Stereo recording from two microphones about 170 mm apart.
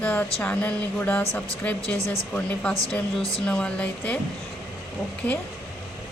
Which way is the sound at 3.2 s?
35° left (ahead or behind).